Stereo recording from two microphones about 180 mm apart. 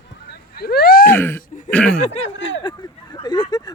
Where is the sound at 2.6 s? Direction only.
25° left (ahead or behind).